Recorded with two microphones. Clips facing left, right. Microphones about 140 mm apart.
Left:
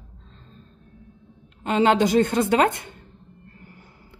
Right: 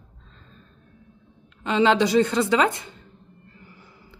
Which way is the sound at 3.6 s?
50° left (ahead or behind).